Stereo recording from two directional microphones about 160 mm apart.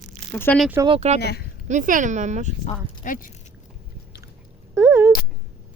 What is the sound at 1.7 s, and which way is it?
Speech, 55° right (ahead or behind).